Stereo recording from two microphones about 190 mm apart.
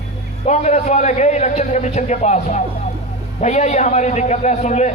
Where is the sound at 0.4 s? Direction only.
35° left (ahead or behind).